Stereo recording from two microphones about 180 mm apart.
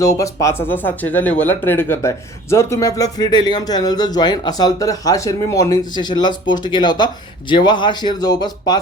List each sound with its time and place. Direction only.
0.0 s speech: 20° left (ahead or behind)